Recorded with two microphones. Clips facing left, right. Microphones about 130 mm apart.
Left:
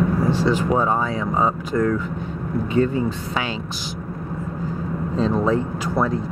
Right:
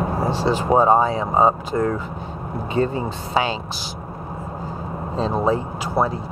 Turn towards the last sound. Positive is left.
turn(degrees=-30)  # may be behind; listen again after turning